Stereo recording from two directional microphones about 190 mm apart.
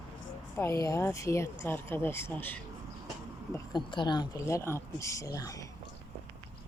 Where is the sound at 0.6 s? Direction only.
15° left (ahead or behind).